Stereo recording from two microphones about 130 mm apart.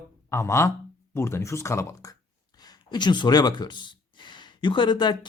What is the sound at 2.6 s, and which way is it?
Speech, 35° left (ahead or behind).